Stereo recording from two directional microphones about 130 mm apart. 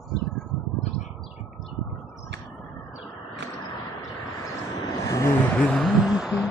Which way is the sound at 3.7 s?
30° left (ahead or behind).